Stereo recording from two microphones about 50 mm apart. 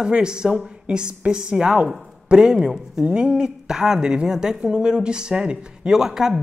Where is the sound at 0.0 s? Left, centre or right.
Centre.